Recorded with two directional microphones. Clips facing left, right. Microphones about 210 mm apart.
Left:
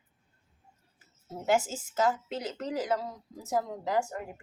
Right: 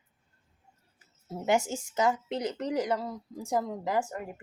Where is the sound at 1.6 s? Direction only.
15° right (ahead or behind).